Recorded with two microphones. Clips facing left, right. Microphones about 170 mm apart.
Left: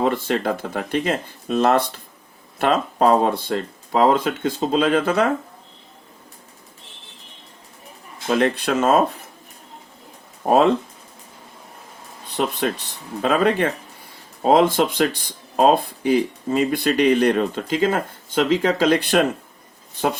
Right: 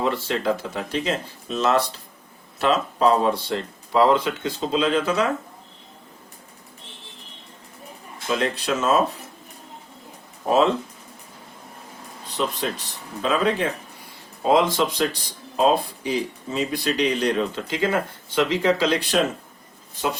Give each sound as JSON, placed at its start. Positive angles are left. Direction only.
{"t": 0.0, "sound": "speech", "side_deg": 50}
{"t": 8.3, "sound": "speech", "side_deg": 55}
{"t": 12.4, "sound": "speech", "side_deg": 55}